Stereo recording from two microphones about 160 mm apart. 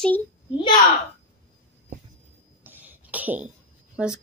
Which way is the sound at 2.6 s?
10° right (ahead or behind).